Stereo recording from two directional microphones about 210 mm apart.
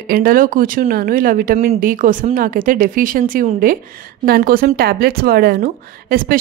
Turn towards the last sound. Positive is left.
turn(degrees=-45)  # may be behind; listen again after turning